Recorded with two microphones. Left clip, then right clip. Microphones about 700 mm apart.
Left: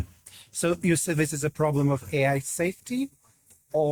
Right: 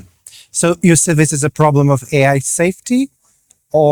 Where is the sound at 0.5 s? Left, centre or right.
Right.